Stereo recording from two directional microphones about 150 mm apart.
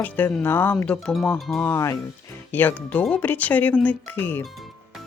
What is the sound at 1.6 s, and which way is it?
Speech, 20° left (ahead or behind).